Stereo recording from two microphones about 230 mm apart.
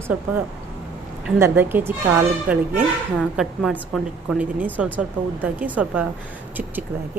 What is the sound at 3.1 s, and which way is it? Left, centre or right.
A woman's voice, centre.